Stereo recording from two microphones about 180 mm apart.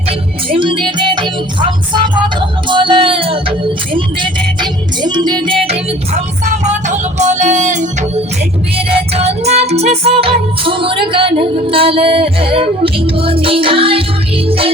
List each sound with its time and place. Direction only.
0.5 s music: 30° right (ahead or behind)
2.4 s music: 25° right (ahead or behind)
6.4 s music: 40° right (ahead or behind)